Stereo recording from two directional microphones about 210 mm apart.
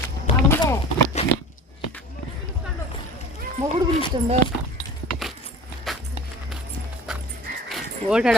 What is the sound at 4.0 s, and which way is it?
Speech, 20° left (ahead or behind).